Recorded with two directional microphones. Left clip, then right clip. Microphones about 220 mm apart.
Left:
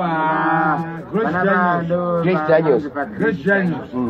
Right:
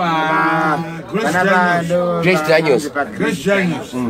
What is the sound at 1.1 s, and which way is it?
Speech, 20° right (ahead or behind).